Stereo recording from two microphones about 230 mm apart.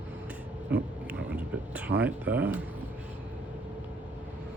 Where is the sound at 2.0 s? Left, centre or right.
Centre.